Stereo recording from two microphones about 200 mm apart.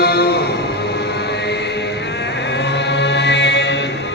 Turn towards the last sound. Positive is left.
turn(degrees=60)  # may be behind; listen again after turning